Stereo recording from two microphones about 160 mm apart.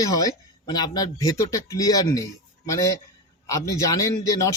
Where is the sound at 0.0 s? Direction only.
20° left (ahead or behind).